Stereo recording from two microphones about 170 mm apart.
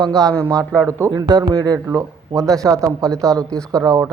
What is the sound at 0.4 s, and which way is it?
A man's voice, 20° right (ahead or behind).